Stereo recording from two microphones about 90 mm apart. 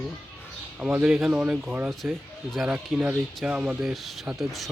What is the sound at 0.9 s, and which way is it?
Speech, 15° right (ahead or behind).